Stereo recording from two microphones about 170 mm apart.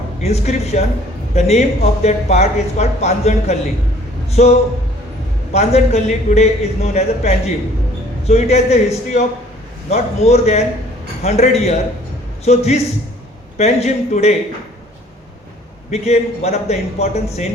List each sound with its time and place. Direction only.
0.2 s a man's voice: 40° left (ahead or behind)
5.5 s a man's voice: 40° left (ahead or behind)
15.9 s a man's voice: 40° left (ahead or behind)